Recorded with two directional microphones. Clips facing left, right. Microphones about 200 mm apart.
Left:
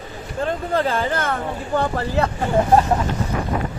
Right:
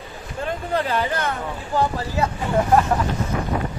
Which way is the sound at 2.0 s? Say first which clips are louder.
Left 3 dB; 60° left (ahead or behind).